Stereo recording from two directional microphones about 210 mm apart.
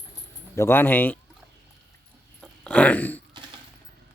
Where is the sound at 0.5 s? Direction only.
10° left (ahead or behind).